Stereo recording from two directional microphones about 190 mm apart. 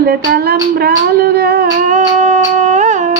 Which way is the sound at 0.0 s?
55° right (ahead or behind).